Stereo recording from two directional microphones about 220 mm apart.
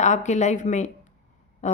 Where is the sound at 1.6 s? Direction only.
30° left (ahead or behind).